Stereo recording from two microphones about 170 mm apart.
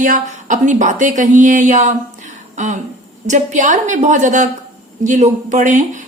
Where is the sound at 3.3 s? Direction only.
45° right (ahead or behind).